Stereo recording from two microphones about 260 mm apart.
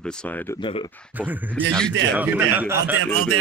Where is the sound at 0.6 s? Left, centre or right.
Centre.